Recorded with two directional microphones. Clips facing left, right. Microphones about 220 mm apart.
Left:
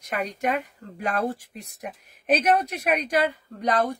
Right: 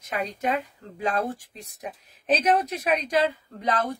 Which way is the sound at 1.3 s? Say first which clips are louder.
Left 2 dB; 10° left (ahead or behind).